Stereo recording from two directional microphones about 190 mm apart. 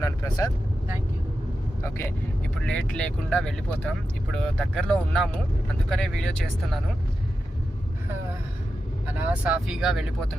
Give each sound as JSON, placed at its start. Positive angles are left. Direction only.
{"t": 0.0, "sound": "vehicle", "side_deg": 20}
{"t": 1.8, "sound": "speech", "side_deg": 15}
{"t": 9.2, "sound": "speech", "side_deg": -5}